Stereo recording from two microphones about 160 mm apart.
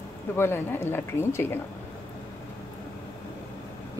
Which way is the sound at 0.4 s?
15° left (ahead or behind).